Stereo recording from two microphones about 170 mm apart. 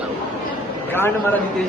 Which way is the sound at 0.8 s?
15° left (ahead or behind).